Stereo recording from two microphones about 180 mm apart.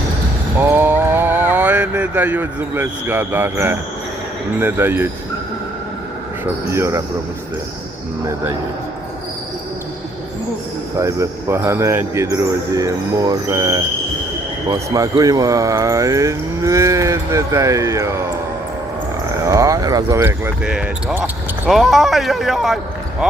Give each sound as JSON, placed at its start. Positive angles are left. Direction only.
{"t": 0.6, "sound": "mantra", "side_deg": -15}
{"t": 4.6, "sound": "speech", "side_deg": -10}
{"t": 6.4, "sound": "speech", "side_deg": -15}
{"t": 10.9, "sound": "speech", "side_deg": -15}
{"t": 19.5, "sound": "speech", "side_deg": -15}